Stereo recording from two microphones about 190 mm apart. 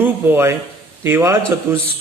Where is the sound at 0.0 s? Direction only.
10° right (ahead or behind).